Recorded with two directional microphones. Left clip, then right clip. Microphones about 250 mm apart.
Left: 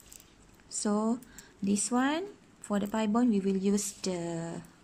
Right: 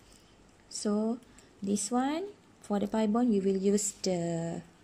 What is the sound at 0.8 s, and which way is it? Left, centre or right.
A woman's voice, centre.